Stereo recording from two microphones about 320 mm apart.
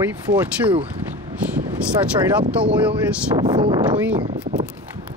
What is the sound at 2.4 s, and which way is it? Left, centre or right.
Speech, centre.